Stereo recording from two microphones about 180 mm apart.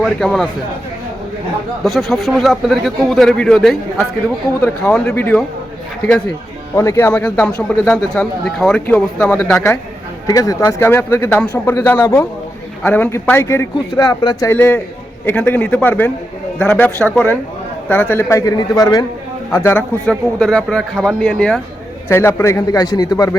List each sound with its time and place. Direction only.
0.0 s a man's voice: 5° left (ahead or behind)
1.8 s a man's voice: centre (ahead or behind)
6.7 s a man's voice: 15° left (ahead or behind)
10.2 s a man's voice: 20° left (ahead or behind)
14.5 s a man's voice: 10° left (ahead or behind)
22.1 s a man's voice: 15° left (ahead or behind)